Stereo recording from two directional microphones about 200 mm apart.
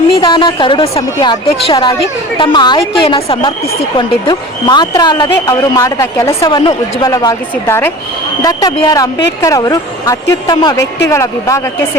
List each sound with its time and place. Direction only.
0.1 s speech: 20° left (ahead or behind)